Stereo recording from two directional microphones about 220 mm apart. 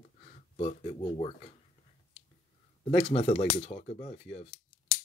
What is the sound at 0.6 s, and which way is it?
Speech, 25° left (ahead or behind).